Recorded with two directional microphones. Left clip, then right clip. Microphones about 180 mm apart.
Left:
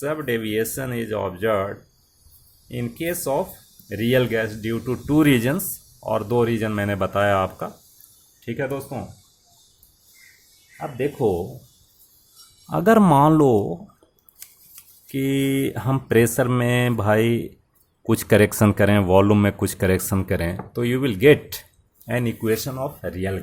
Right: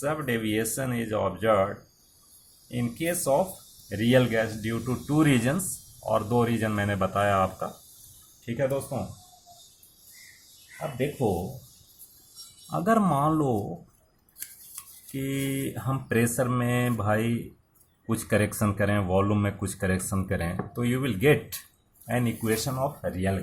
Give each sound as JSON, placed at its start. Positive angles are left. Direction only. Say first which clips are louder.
{"t": 0.0, "sound": "speech", "louder": "left 4 dB", "side_deg": 45}
{"t": 12.7, "sound": "speech", "louder": "left 8 dB", "side_deg": 50}
{"t": 15.1, "sound": "speech", "louder": "left 9 dB", "side_deg": 50}